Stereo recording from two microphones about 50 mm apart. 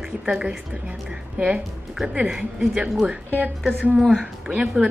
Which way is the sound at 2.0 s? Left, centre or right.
Centre.